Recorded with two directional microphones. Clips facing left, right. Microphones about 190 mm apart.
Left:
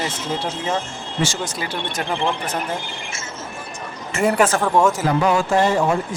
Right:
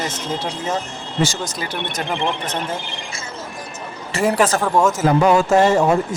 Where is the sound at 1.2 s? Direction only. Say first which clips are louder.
Right 2 dB; 40° right (ahead or behind).